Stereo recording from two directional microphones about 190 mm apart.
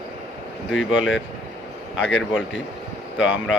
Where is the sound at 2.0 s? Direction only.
75° left (ahead or behind).